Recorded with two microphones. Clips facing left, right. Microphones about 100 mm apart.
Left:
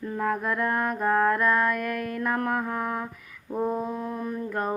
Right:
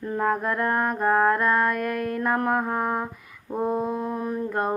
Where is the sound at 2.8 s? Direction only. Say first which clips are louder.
Right 4 dB; 30° right (ahead or behind).